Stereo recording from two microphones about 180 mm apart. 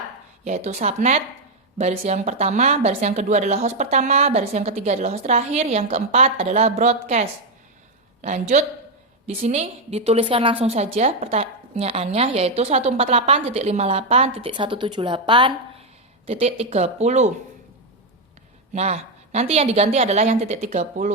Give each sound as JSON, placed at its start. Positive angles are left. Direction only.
{"t": 0.4, "sound": "a woman's voice", "side_deg": -40}
{"t": 18.7, "sound": "a woman's voice", "side_deg": -40}